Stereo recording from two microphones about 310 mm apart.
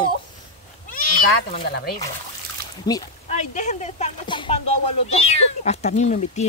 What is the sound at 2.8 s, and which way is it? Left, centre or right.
Speech, centre.